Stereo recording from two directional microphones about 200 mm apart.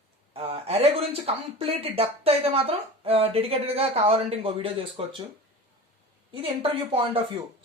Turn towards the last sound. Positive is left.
turn(degrees=-25)  # may be behind; listen again after turning